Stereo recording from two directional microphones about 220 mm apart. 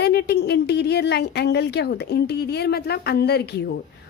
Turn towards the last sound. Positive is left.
turn(degrees=50)  # may be behind; listen again after turning